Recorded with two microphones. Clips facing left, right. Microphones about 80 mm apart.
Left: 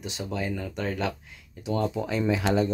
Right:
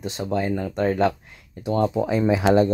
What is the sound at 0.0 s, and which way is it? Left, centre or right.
Speech, right.